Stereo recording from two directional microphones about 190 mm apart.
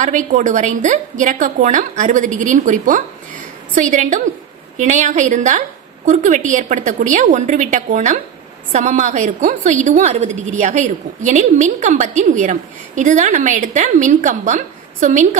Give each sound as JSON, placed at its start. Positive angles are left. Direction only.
{"t": 0.0, "sound": "a woman's voice", "side_deg": -40}